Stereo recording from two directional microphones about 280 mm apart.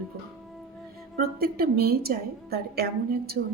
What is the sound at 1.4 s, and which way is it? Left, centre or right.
A woman's voice, right.